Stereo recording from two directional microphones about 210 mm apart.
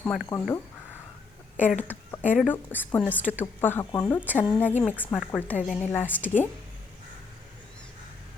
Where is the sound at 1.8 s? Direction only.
10° left (ahead or behind).